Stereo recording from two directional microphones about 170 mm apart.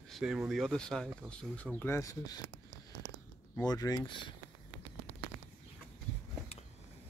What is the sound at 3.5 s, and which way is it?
Speech, 20° left (ahead or behind).